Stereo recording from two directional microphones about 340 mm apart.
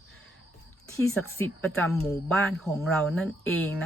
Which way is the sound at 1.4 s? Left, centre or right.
Centre.